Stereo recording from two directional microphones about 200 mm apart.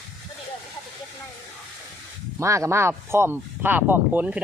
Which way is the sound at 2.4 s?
15° right (ahead or behind).